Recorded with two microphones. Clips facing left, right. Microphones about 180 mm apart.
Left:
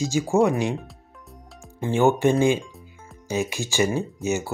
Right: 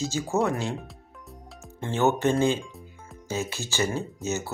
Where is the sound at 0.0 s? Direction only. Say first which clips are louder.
Left 6 dB; 15° left (ahead or behind).